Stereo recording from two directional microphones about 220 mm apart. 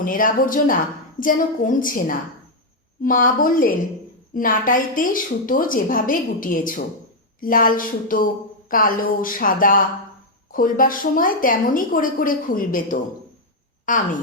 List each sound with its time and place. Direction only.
0.0 s a woman's voice: 40° left (ahead or behind)